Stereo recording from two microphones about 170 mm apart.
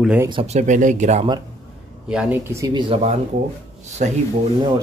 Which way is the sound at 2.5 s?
20° right (ahead or behind).